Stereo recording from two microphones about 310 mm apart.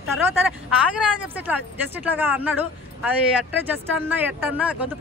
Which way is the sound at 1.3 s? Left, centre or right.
Centre.